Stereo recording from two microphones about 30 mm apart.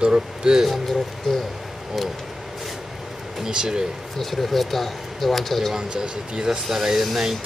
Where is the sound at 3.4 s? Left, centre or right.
Right.